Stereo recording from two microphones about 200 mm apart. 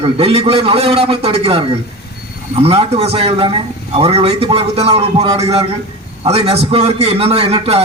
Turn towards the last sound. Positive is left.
turn(degrees=-30)  # may be behind; listen again after turning